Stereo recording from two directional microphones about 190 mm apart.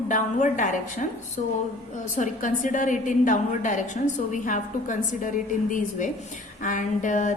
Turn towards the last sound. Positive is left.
turn(degrees=40)  # may be behind; listen again after turning